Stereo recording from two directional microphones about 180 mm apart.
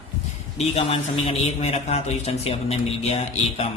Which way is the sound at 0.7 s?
35° left (ahead or behind).